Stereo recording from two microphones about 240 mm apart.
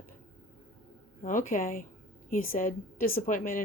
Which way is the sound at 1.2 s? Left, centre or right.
Left.